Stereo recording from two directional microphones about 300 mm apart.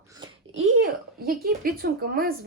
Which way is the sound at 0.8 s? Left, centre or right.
Right.